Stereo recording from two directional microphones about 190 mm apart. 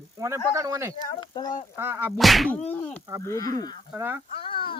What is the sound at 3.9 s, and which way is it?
Speech, 15° right (ahead or behind).